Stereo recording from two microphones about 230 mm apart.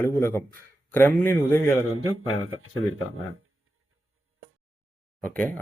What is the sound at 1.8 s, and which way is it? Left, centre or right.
A man's voice, right.